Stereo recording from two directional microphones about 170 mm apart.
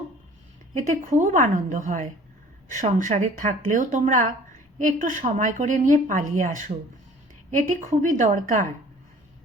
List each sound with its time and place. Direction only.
1.1 s speech: 45° right (ahead or behind)
7.7 s speech: 50° right (ahead or behind)